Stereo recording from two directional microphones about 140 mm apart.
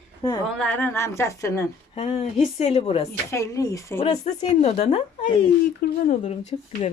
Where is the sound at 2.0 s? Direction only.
45° left (ahead or behind).